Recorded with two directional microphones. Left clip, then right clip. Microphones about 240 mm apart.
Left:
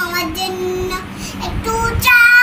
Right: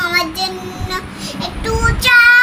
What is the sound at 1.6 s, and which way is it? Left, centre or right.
Music, centre.